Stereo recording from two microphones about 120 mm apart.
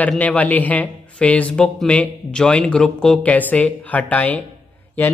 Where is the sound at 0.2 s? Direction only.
10° left (ahead or behind).